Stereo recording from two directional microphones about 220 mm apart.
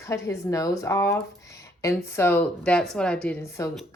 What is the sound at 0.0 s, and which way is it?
A woman's voice, 15° left (ahead or behind).